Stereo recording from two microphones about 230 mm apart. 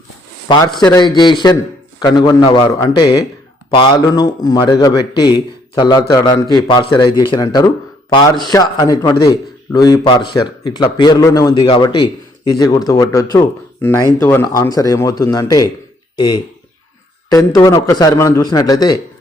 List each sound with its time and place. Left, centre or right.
0.4 s a man's voice: centre